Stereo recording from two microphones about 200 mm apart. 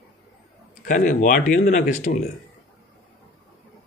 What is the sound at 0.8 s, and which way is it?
Speech, 40° left (ahead or behind).